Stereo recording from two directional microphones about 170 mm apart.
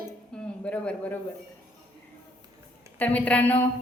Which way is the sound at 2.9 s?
10° left (ahead or behind).